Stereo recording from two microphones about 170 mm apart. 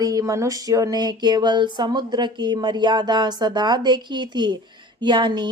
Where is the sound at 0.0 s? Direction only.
20° right (ahead or behind).